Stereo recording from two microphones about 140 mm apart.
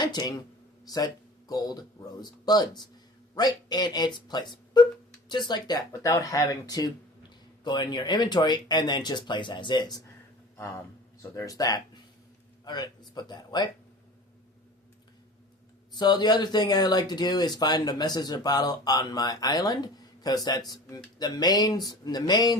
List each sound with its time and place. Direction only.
0.0 s speech: 30° left (ahead or behind)
10.6 s speech: 20° left (ahead or behind)
15.9 s speech: 30° left (ahead or behind)